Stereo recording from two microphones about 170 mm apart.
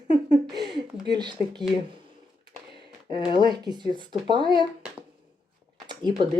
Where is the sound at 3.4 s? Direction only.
25° right (ahead or behind).